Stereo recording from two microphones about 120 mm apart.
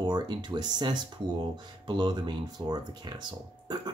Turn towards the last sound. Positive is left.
turn(degrees=-40)  # may be behind; listen again after turning